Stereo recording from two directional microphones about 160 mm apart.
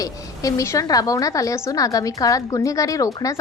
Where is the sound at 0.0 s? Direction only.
20° left (ahead or behind).